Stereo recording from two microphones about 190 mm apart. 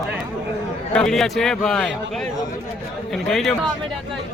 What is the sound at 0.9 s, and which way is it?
A man's voice, 5° left (ahead or behind).